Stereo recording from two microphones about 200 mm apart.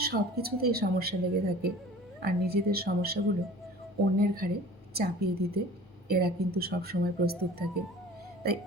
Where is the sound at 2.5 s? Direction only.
50° right (ahead or behind).